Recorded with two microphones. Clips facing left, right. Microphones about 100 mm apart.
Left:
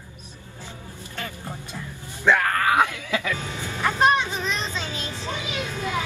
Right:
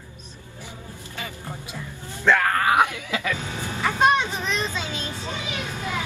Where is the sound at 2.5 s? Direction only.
20° right (ahead or behind).